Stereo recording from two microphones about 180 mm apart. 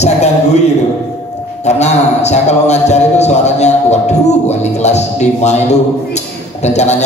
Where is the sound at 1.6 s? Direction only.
40° left (ahead or behind).